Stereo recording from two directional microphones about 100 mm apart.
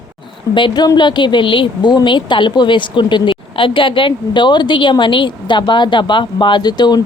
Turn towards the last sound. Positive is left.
turn(degrees=45)  # may be behind; listen again after turning